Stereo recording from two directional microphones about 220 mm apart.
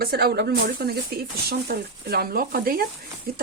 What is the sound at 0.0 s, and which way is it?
Speech, 45° right (ahead or behind).